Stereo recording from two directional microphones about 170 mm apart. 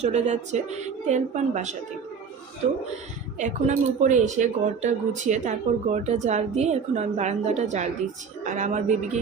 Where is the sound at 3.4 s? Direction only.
45° right (ahead or behind).